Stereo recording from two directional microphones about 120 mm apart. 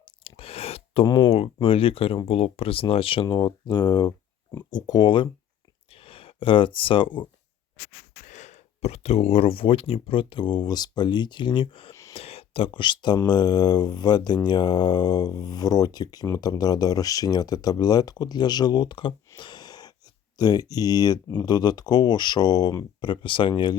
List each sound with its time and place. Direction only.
0.3 s a sound: 50° left (ahead or behind)
1.0 s speech: 45° left (ahead or behind)
4.7 s mantra: 35° left (ahead or behind)
5.9 s speech: 50° left (ahead or behind)
8.3 s speech: 75° left (ahead or behind); by 11.9 s 45° left (ahead or behind)
12.1 s a sound: 55° left (ahead or behind); by 13.1 s 40° left (ahead or behind)
13.2 s mantra: 35° left (ahead or behind)
19.4 s gasp: 40° left (ahead or behind)
20.3 s mantra: 35° left (ahead or behind)
23.0 s mantra: 40° left (ahead or behind)